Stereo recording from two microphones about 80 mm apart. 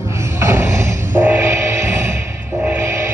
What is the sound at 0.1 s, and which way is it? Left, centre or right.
Music, right.